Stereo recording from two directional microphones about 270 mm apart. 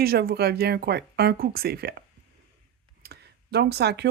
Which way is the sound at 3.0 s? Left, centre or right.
Right.